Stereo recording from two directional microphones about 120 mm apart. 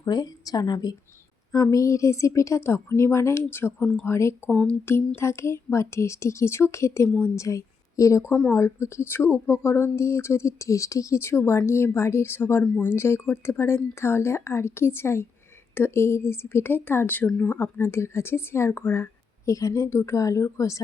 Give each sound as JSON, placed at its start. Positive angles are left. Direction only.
{"t": 0.0, "sound": "speech", "side_deg": 35}
{"t": 4.4, "sound": "speech", "side_deg": 10}
{"t": 4.9, "sound": "a woman's voice", "side_deg": 20}